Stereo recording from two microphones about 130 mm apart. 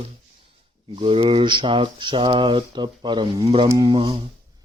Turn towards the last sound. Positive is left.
turn(degrees=-40)  # may be behind; listen again after turning